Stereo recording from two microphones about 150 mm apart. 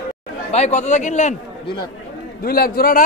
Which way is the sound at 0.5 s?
50° left (ahead or behind).